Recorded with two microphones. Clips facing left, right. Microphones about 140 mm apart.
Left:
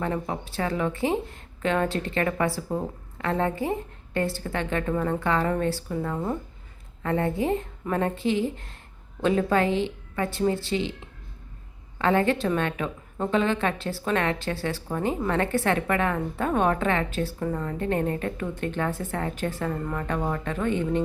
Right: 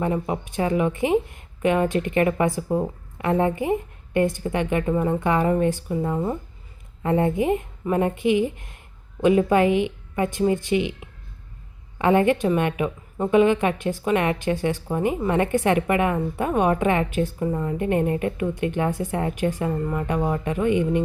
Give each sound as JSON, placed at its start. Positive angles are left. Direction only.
{"t": 0.0, "sound": "a woman's voice", "side_deg": -15}